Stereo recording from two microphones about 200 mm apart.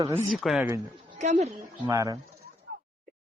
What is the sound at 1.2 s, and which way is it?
Speech, 35° right (ahead or behind).